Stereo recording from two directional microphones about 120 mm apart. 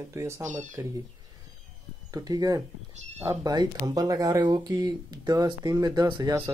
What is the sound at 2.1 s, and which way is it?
Speech, 30° right (ahead or behind).